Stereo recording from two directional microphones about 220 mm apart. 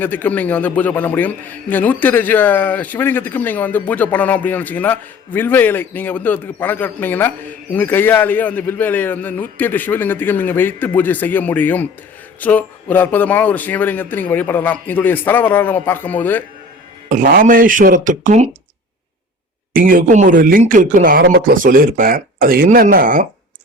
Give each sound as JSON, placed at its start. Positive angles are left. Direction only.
{"t": 0.0, "sound": "a man's voice", "side_deg": 10}
{"t": 17.1, "sound": "speech", "side_deg": -35}
{"t": 19.7, "sound": "speech", "side_deg": -40}